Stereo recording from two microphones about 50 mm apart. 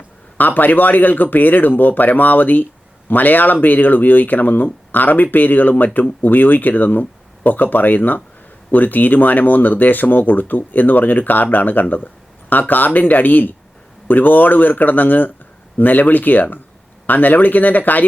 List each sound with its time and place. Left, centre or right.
0.3 s speech: left